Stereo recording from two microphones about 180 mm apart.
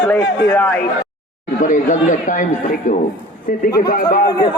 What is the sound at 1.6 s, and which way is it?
A man's voice, 45° left (ahead or behind).